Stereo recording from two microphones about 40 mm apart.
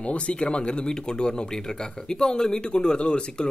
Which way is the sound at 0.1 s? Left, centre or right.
Left.